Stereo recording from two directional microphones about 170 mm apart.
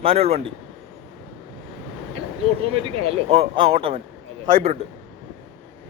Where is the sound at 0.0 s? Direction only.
35° right (ahead or behind).